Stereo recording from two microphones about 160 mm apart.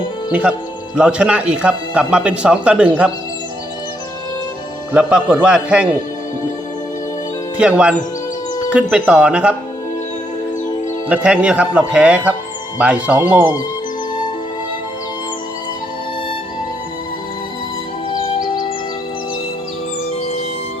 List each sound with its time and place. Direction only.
0.3 s speech: 10° right (ahead or behind)
4.9 s speech: 5° right (ahead or behind)
7.5 s speech: 5° right (ahead or behind)
11.1 s speech: 5° right (ahead or behind)
18.1 s music: 30° left (ahead or behind)